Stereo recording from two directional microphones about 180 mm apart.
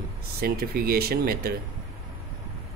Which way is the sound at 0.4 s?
55° right (ahead or behind).